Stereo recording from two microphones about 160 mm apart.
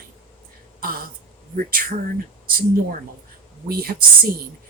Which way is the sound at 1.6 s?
65° right (ahead or behind).